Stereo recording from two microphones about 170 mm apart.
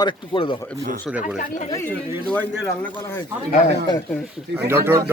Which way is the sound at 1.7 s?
10° left (ahead or behind).